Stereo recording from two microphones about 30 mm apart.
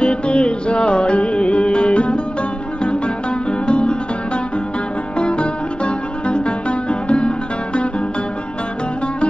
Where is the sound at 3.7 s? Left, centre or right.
Left.